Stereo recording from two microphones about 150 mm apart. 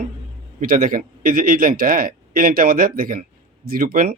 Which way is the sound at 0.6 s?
65° right (ahead or behind).